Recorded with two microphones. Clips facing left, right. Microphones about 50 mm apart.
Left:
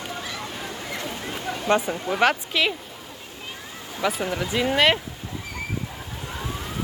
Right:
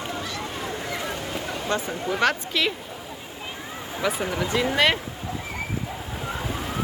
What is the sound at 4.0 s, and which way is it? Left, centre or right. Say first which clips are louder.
Speech: left 1 dB; centre.